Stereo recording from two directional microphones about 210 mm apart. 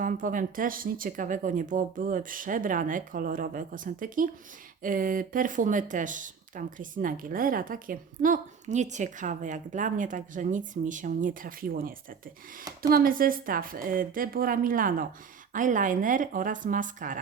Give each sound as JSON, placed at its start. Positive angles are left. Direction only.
{"t": 0.0, "sound": "a woman's voice", "side_deg": -40}